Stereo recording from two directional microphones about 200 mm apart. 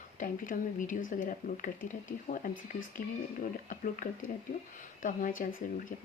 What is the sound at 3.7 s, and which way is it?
Speech, 40° left (ahead or behind).